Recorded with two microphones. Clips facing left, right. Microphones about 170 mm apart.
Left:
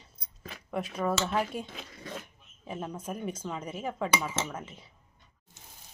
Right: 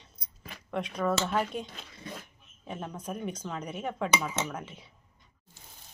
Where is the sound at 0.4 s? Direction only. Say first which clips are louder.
Even; 5° left (ahead or behind).